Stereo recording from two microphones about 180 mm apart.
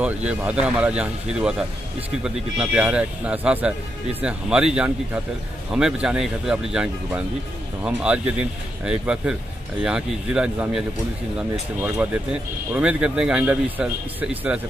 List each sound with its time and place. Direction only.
0.0 s speech: 10° right (ahead or behind)
11.8 s speech: 10° right (ahead or behind)